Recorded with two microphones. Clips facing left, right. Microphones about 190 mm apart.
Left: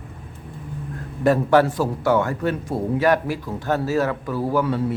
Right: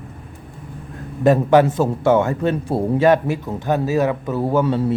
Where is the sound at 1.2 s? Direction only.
20° right (ahead or behind).